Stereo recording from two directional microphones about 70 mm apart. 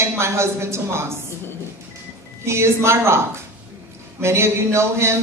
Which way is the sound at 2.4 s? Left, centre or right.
Right.